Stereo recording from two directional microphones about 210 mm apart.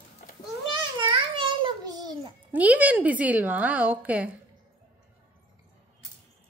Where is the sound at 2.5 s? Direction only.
5° right (ahead or behind).